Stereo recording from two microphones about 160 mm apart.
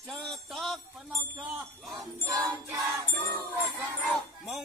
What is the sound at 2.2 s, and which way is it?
Music, 20° right (ahead or behind).